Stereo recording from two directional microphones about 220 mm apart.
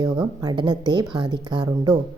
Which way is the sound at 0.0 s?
15° right (ahead or behind).